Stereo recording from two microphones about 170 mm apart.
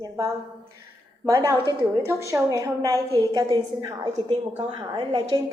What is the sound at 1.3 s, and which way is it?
A woman's voice, 20° right (ahead or behind).